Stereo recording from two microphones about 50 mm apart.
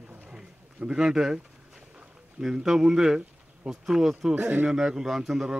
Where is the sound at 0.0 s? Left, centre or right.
Right.